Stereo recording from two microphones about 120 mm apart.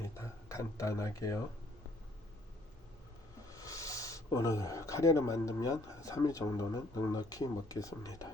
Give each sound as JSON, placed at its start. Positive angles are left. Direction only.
{"t": 0.0, "sound": "speech", "side_deg": 25}
{"t": 3.6, "sound": "speech", "side_deg": 30}